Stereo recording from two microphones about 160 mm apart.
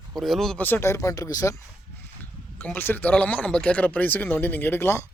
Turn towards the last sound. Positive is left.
turn(degrees=15)  # may be behind; listen again after turning